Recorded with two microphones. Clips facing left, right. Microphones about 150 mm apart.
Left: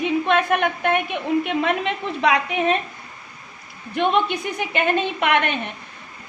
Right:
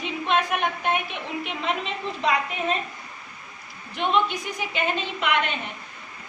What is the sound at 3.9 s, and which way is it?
A woman's voice, 60° left (ahead or behind).